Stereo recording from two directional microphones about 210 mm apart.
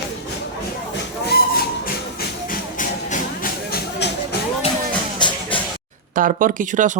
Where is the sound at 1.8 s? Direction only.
45° left (ahead or behind).